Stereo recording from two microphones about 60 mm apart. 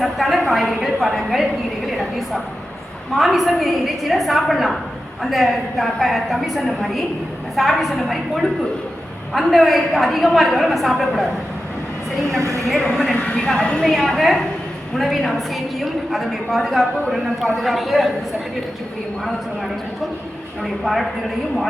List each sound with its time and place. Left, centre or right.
0.0 s a woman's voice: centre
12.4 s a woman's voice: right
13.3 s a woman's voice: centre
20.8 s a woman's voice: centre